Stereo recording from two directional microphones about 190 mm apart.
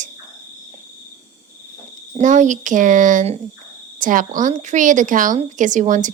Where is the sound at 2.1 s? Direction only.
40° right (ahead or behind).